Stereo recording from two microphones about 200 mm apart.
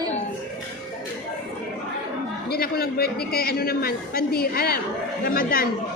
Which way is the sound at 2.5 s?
50° left (ahead or behind).